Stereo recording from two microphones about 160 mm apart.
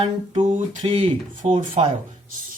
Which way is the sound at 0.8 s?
30° right (ahead or behind).